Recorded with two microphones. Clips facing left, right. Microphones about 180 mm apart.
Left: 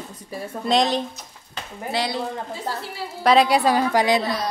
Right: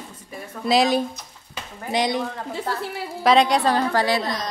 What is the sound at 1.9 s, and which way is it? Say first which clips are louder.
Speech: right 3 dB; 20° right (ahead or behind).